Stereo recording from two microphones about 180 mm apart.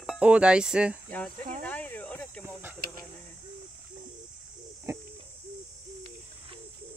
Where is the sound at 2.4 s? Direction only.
10° right (ahead or behind).